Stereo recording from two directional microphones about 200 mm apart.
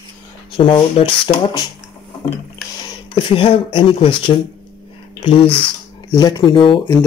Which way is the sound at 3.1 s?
25° left (ahead or behind).